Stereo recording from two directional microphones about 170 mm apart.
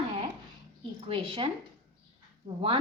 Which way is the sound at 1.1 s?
30° right (ahead or behind).